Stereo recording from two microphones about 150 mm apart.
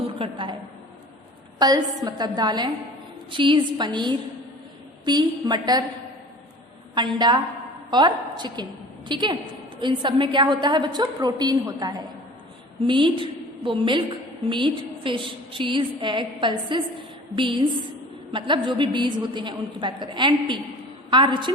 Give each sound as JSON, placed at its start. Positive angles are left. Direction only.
{"t": 0.1, "sound": "a woman's voice", "side_deg": -35}
{"t": 1.5, "sound": "a woman's voice", "side_deg": -25}
{"t": 6.9, "sound": "a woman's voice", "side_deg": -30}